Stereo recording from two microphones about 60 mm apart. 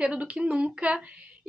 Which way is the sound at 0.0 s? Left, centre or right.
Centre.